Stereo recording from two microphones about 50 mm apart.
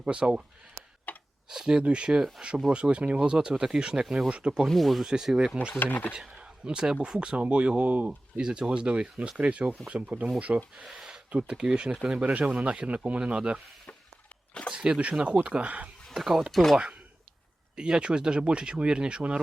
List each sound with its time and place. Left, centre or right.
0.0 s speech: centre
1.1 s tick-tock: left
1.5 s speech: centre
4.7 s speech: centre
5.0 s speech: centre
5.8 s speech: left
6.1 s a man's voice: centre
8.0 s speech: centre
10.8 s a sound: centre
11.3 s speech: right
12.2 s speech: right
14.8 s speech: right
16.1 s speech: centre
17.7 s speech: centre